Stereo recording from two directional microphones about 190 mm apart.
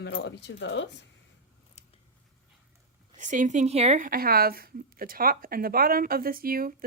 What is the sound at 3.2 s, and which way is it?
Speech, 40° right (ahead or behind).